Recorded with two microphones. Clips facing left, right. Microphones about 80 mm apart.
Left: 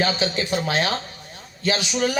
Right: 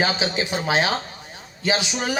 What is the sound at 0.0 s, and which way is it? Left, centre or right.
A woman's voice, centre.